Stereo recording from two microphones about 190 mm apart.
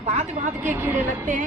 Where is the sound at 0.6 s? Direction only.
10° right (ahead or behind).